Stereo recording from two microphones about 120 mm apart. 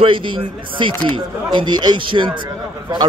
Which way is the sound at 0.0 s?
45° right (ahead or behind).